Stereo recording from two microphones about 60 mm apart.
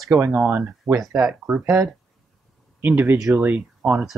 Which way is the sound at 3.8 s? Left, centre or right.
Right.